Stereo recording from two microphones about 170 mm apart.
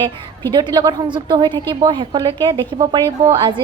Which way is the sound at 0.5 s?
25° right (ahead or behind).